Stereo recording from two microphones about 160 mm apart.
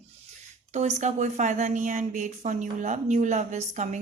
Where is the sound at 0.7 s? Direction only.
45° right (ahead or behind).